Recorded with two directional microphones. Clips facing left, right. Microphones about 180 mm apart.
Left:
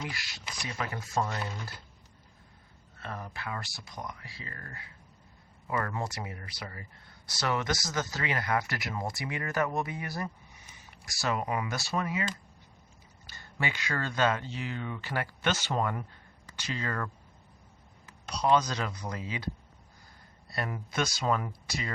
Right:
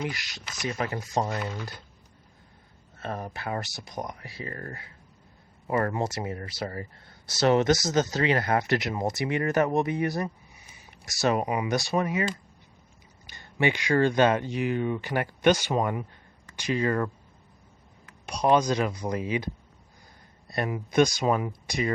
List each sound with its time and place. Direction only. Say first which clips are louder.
0.0 s speech: right 6 dB; 20° right (ahead or behind)
1.1 s speech: right 2 dB; 35° right (ahead or behind)
3.0 s speech: right 6 dB; 30° right (ahead or behind)
5.9 s speech: right 6 dB; 20° right (ahead or behind); by 6.8 s 40° right (ahead or behind)
7.3 s speech: right 10 dB; 25° right (ahead or behind)
10.5 s a sound: right 1 dB; 10° right (ahead or behind)
11.0 s speech: right 7 dB; 20° right (ahead or behind)
13.2 s speech: right 9 dB; 20° right (ahead or behind)
18.3 s speech: right 4 dB; 15° right (ahead or behind)
20.5 s speech: right 6 dB; 20° right (ahead or behind)